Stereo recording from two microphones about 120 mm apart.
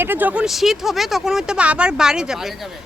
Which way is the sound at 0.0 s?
15° right (ahead or behind).